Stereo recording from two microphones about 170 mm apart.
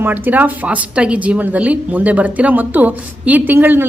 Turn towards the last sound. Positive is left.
turn(degrees=-10)  # may be behind; listen again after turning